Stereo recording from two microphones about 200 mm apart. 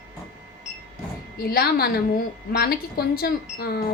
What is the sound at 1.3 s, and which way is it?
Speech, 50° left (ahead or behind).